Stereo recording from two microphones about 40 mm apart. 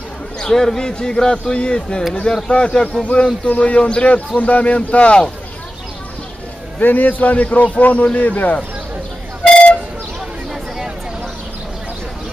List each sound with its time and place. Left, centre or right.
0.4 s speech: centre
6.8 s a man's voice: left